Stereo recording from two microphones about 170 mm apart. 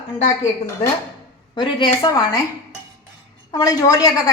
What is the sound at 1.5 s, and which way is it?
Speech, 30° left (ahead or behind).